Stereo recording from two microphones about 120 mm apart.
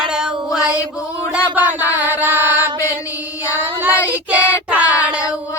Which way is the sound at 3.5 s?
15° right (ahead or behind).